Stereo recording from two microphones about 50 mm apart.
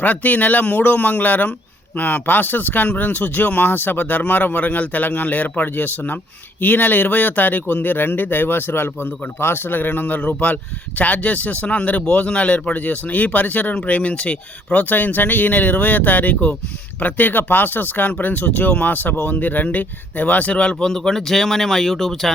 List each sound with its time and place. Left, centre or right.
0.0 s speech: left
20.6 s speech: centre